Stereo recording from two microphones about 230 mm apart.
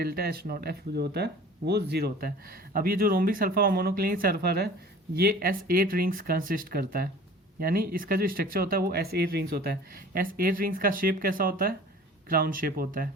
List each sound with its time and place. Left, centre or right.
0.0 s speech: right